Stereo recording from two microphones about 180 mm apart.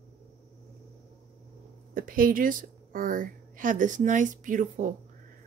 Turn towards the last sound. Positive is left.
turn(degrees=-45)  # may be behind; listen again after turning